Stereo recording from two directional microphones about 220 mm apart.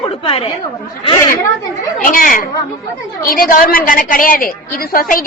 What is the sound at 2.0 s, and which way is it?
A woman's voice, 40° left (ahead or behind).